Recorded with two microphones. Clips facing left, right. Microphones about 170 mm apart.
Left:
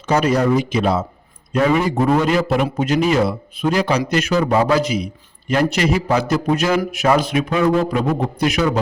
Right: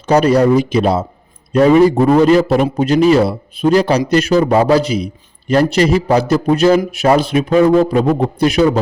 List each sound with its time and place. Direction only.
0.1 s a man's voice: 35° right (ahead or behind)